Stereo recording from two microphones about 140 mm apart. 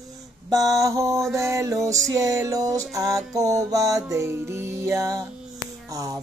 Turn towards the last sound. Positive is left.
turn(degrees=-25)  # may be behind; listen again after turning